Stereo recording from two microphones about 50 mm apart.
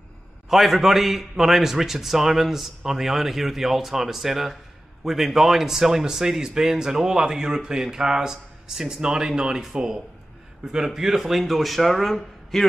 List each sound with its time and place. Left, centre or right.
0.5 s a man's voice: centre